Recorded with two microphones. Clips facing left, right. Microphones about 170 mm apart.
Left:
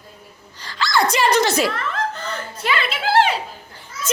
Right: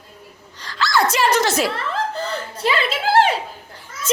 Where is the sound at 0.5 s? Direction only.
Centre (ahead or behind).